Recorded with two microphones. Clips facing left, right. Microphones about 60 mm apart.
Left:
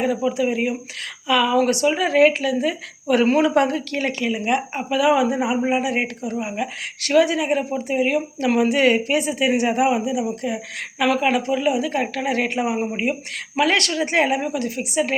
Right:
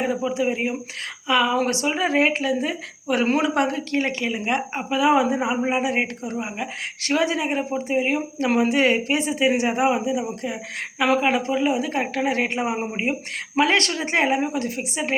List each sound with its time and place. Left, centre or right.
0.0 s speech: right